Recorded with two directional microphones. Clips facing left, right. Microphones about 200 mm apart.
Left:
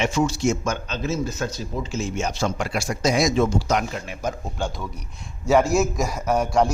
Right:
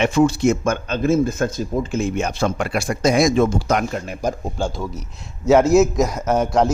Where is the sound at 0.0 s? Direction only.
55° right (ahead or behind); by 4.5 s 40° right (ahead or behind).